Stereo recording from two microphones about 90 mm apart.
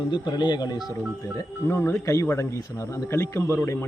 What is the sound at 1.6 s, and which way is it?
Speech, 25° left (ahead or behind).